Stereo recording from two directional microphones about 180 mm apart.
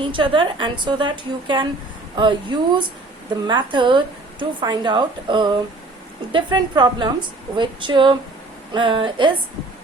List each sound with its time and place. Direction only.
0.0 s speech: 30° right (ahead or behind)